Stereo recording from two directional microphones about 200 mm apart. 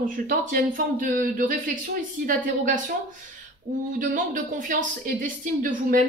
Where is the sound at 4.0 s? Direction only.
40° right (ahead or behind).